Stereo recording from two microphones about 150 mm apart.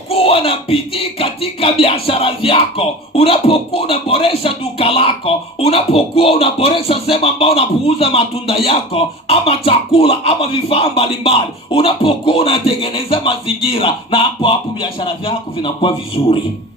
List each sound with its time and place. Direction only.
0.1 s music: 40° left (ahead or behind)